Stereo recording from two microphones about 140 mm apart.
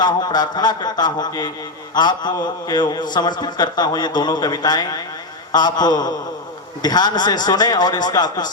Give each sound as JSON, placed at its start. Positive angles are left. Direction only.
{"t": 0.0, "sound": "a man's voice", "side_deg": 30}